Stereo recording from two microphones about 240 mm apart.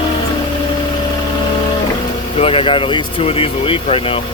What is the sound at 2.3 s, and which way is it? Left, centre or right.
Speech, left.